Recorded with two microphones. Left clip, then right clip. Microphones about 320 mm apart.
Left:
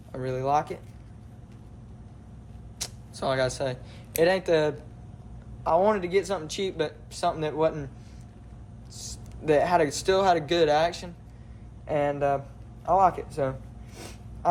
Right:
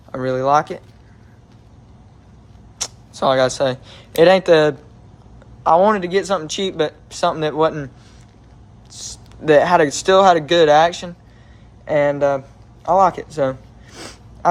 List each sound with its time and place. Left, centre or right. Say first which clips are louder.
0.1 s speech: right 10 dB; right
2.7 s speech: right 10 dB; right
8.9 s speech: right 8 dB; right